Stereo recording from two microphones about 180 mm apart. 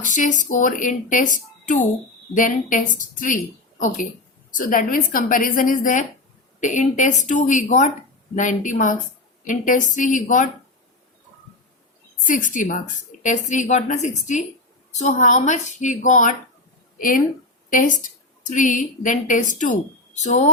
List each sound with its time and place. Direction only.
0.0 s a woman's voice: 45° left (ahead or behind)
12.2 s a woman's voice: 45° left (ahead or behind)